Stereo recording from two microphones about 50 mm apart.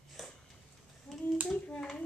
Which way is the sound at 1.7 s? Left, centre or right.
Centre.